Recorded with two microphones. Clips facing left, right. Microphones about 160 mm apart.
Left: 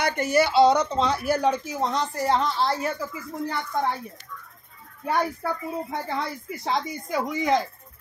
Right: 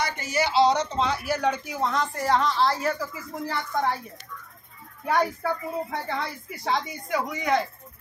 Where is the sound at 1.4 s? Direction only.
25° left (ahead or behind).